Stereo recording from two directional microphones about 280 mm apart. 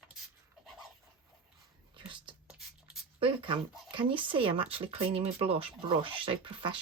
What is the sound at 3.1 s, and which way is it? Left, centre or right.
Speech, centre.